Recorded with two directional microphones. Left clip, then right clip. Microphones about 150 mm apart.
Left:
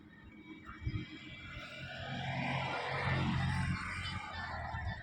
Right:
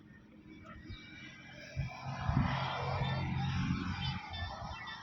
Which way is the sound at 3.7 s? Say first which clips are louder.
Left 1 dB; 35° left (ahead or behind).